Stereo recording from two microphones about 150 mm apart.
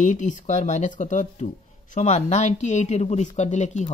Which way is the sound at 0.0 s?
55° left (ahead or behind).